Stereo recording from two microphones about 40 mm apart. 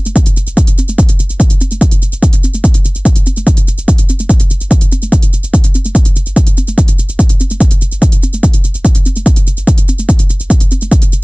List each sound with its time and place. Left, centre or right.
0.2 s music: right
0.7 s music: centre